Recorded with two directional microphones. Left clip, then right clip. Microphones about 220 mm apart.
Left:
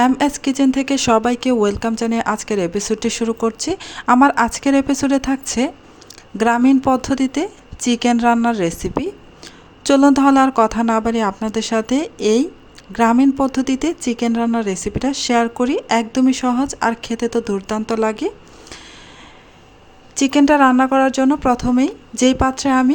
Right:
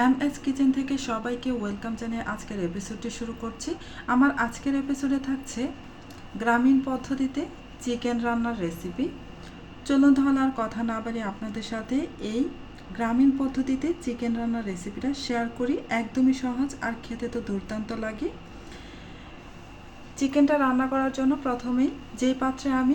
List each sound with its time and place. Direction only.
0.0 s a woman's voice: 50° left (ahead or behind)
20.1 s a woman's voice: 50° left (ahead or behind)